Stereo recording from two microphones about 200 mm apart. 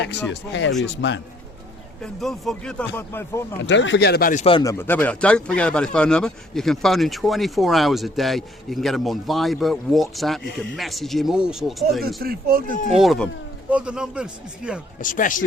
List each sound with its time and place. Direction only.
0.3 s speech: 65° left (ahead or behind)
2.0 s speech: centre (ahead or behind)
3.6 s speech: 65° left (ahead or behind); by 4.4 s 45° left (ahead or behind)
4.4 s speech: 20° left (ahead or behind); by 10.4 s centre (ahead or behind)
10.4 s speech: 55° left (ahead or behind)
10.8 s speech: centre (ahead or behind)
12.0 s speech: 50° right (ahead or behind)
12.9 s speech: centre (ahead or behind)
15.0 s a man's voice: 40° left (ahead or behind)